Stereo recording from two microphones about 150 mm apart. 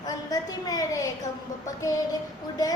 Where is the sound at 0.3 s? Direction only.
25° left (ahead or behind).